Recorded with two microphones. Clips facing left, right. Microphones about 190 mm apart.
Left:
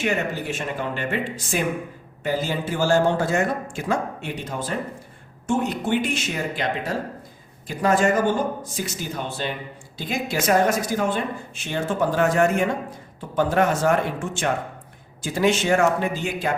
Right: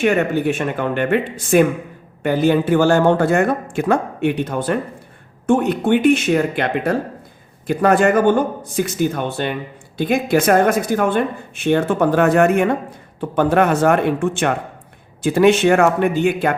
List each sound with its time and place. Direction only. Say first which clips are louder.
0.0 s speech: right 8 dB; 55° right (ahead or behind)